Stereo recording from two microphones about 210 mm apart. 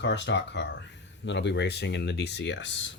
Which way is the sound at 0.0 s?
55° left (ahead or behind).